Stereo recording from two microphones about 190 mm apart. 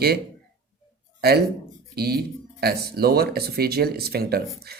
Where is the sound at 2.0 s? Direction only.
55° right (ahead or behind).